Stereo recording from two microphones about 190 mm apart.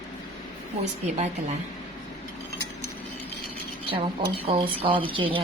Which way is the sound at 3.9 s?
30° right (ahead or behind).